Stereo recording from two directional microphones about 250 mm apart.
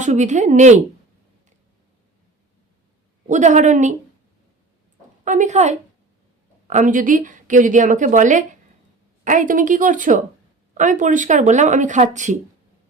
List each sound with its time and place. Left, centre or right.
0.0 s speech: right
3.2 s speech: right
5.2 s a woman's voice: right